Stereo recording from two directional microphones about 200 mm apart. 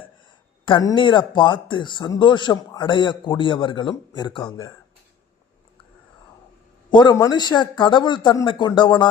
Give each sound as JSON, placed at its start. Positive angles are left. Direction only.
{"t": 0.6, "sound": "speech", "side_deg": 20}
{"t": 6.9, "sound": "speech", "side_deg": 20}